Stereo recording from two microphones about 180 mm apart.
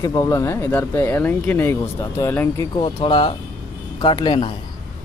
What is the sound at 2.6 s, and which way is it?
Speech, 25° left (ahead or behind).